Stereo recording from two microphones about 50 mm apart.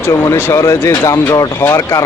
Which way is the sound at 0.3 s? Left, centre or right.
Left.